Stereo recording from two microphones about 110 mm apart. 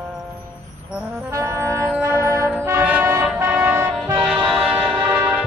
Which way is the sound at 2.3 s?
20° right (ahead or behind).